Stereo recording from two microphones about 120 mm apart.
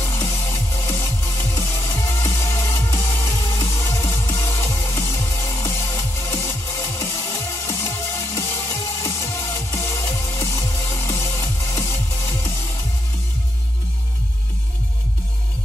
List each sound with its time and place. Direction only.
0.0 s music: 20° left (ahead or behind)